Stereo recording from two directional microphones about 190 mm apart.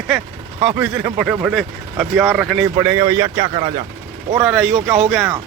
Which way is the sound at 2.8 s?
15° right (ahead or behind).